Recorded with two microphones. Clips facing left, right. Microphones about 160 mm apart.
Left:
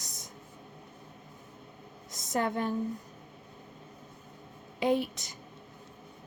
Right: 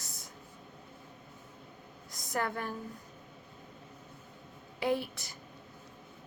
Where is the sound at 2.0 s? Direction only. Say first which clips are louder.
Left 4 dB; 20° left (ahead or behind).